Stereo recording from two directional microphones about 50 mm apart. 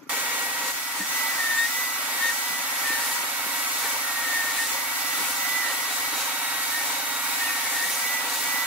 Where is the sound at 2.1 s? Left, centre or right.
Right.